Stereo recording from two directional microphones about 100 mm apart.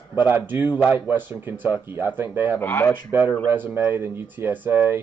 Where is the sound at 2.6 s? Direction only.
20° left (ahead or behind).